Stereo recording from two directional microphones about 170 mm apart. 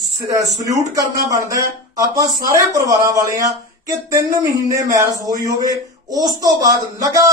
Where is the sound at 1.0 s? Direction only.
20° right (ahead or behind).